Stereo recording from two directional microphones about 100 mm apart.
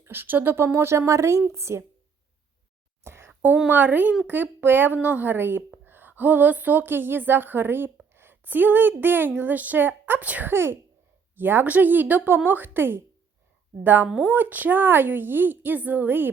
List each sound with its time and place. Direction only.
0.0 s a woman's voice: 20° right (ahead or behind)
3.0 s a sound: 25° right (ahead or behind)
3.7 s a woman's voice: 15° right (ahead or behind)